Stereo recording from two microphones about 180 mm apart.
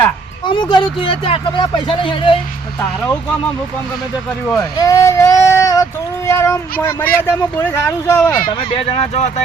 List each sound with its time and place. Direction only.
0.4 s speech: 25° left (ahead or behind)
4.8 s child singing: 15° left (ahead or behind)
8.4 s speech: 30° left (ahead or behind)